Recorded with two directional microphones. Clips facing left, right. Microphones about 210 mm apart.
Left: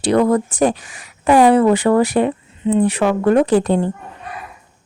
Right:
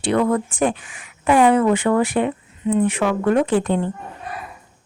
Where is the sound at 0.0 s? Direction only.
40° left (ahead or behind).